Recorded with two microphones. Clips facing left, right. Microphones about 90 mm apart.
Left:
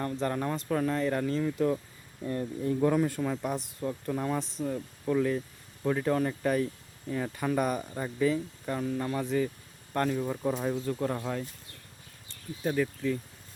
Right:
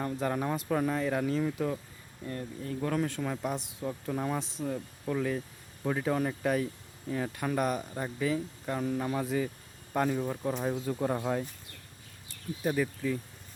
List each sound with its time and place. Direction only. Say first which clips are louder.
0.0 s speech: left 1 dB; 5° right (ahead or behind)
2.2 s speech: left 7 dB; 20° left (ahead or behind)
2.8 s speech: left 4 dB; 5° left (ahead or behind); by 11.4 s 15° right (ahead or behind)
12.6 s speech: left 1 dB; 5° right (ahead or behind)